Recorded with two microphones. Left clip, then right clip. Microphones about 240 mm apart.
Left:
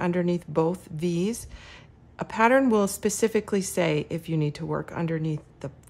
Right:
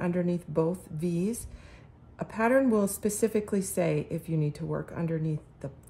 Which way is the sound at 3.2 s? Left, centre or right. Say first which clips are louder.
Left 3 dB; centre.